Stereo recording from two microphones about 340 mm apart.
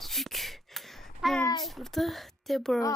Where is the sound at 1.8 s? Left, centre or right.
Centre.